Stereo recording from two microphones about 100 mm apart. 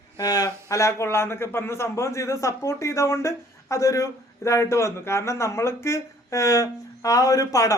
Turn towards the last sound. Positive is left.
turn(degrees=30)  # may be behind; listen again after turning